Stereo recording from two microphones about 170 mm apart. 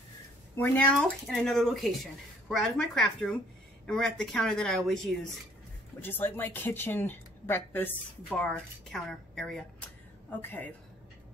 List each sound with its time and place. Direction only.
0.6 s speech: 5° left (ahead or behind)